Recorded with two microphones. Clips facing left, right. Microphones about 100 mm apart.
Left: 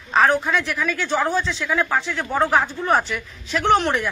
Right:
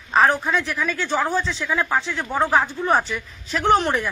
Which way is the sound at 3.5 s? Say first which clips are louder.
Even; 35° right (ahead or behind).